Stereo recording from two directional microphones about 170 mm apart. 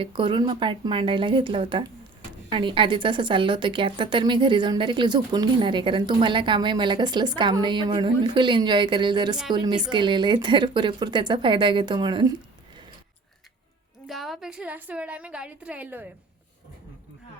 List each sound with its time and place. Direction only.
0.0 s a woman's voice: 30° right (ahead or behind)
14.1 s a woman's voice: centre (ahead or behind)